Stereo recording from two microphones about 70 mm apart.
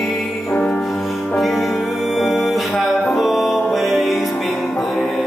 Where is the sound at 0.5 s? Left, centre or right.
Centre.